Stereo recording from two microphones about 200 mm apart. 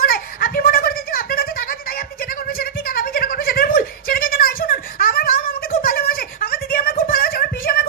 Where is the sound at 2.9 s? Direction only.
45° left (ahead or behind).